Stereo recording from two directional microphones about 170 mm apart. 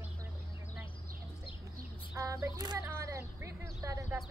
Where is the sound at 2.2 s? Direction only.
20° right (ahead or behind).